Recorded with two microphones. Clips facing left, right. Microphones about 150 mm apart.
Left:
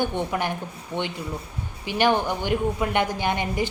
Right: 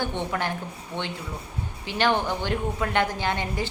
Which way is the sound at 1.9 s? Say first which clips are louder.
Left 2 dB; 15° left (ahead or behind).